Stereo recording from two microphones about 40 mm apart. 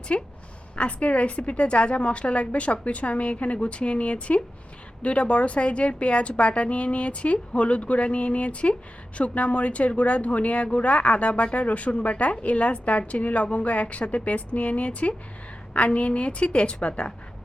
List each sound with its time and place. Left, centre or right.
0.1 s a woman's voice: left